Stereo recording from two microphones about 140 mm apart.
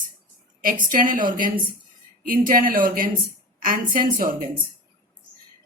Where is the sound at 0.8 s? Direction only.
75° right (ahead or behind).